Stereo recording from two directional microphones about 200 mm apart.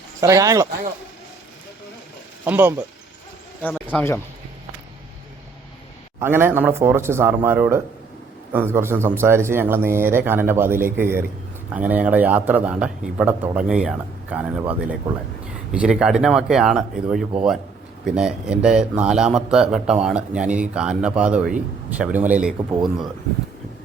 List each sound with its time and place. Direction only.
0.2 s speech: 15° right (ahead or behind)
2.4 s speech: 10° right (ahead or behind)
3.6 s speech: 10° left (ahead or behind)
6.1 s speech: 10° right (ahead or behind)
15.7 s a man's voice: 5° right (ahead or behind)